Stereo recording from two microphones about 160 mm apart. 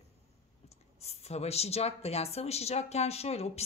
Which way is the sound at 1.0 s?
40° left (ahead or behind).